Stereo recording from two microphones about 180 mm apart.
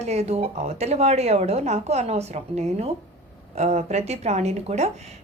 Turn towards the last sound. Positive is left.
turn(degrees=-35)  # may be behind; listen again after turning